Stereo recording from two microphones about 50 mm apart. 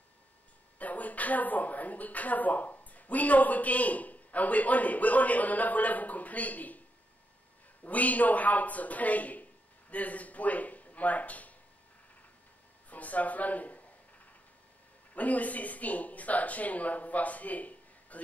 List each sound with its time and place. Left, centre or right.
0.7 s a woman's voice: left
7.8 s a man's voice: left
12.9 s a woman's voice: left